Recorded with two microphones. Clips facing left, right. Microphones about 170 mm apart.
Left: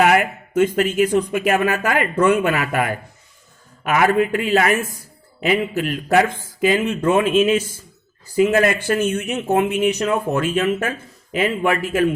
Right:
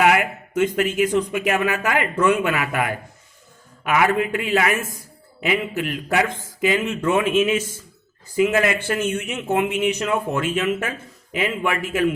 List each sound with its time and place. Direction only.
0.0 s speech: 40° left (ahead or behind)